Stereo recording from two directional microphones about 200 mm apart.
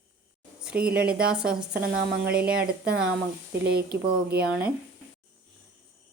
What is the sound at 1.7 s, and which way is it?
Speech, 55° right (ahead or behind).